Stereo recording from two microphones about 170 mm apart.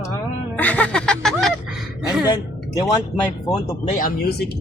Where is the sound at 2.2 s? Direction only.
25° left (ahead or behind).